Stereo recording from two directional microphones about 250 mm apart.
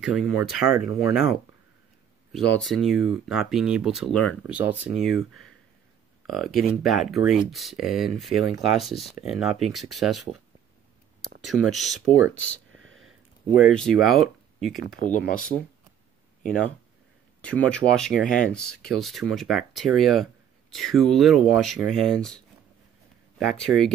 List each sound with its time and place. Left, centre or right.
0.0 s speech: centre
2.5 s speech: centre
4.4 s speech: centre
11.4 s speech: centre
12.2 s speech: left
12.8 s a sound: centre
13.6 s speech: centre
17.4 s speech: centre
23.5 s speech: centre